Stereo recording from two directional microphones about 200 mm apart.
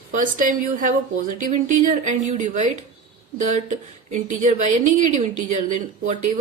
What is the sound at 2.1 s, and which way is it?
Speech, 35° right (ahead or behind).